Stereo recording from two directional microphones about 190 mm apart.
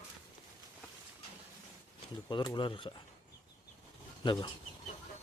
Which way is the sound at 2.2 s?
25° left (ahead or behind).